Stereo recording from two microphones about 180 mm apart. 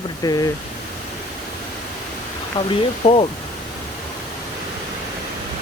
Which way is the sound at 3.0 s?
30° left (ahead or behind).